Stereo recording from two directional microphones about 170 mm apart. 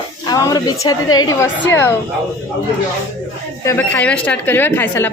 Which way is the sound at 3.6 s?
15° left (ahead or behind).